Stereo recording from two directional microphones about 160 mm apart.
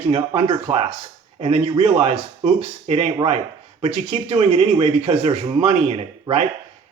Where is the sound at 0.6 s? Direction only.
45° right (ahead or behind).